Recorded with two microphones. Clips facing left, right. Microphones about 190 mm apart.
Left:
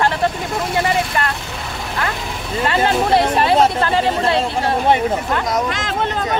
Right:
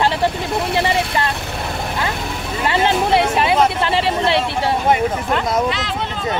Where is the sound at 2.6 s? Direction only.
20° right (ahead or behind).